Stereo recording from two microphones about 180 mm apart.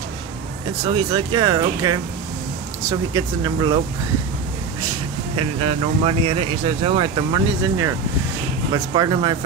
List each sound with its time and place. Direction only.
0.9 s speech: 25° right (ahead or behind)
3.1 s speech: 25° right (ahead or behind)
5.3 s speech: 30° right (ahead or behind)